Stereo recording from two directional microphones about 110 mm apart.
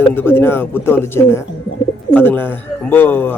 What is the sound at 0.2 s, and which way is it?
A man's voice, 20° left (ahead or behind).